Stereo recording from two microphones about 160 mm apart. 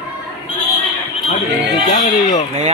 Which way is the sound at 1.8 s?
50° left (ahead or behind).